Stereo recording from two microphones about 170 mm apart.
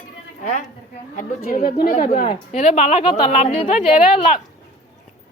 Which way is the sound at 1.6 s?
60° left (ahead or behind).